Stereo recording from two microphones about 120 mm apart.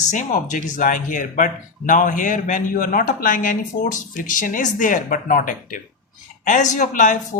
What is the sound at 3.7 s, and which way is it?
Speech, 85° left.